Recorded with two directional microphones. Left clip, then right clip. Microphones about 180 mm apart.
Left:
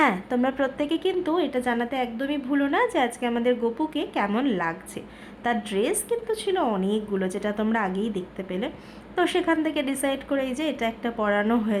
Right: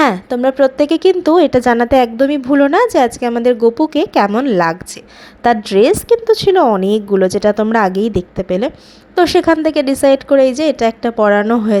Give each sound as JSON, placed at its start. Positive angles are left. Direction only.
{"t": 0.0, "sound": "speech", "side_deg": -30}